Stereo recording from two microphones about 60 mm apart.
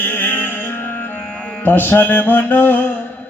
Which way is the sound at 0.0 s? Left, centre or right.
Left.